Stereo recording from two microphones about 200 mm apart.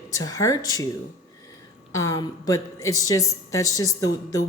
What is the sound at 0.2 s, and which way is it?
Speech, 15° left (ahead or behind).